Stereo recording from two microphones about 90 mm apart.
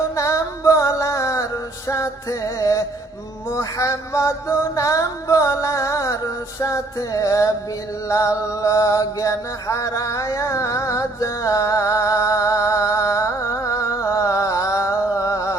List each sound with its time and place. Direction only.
0.2 s music: 35° left (ahead or behind)